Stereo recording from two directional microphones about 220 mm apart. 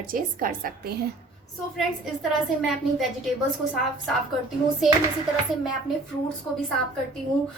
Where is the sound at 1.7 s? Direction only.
Centre (ahead or behind).